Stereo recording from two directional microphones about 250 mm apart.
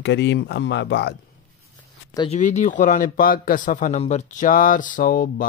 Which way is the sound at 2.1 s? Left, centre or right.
Left.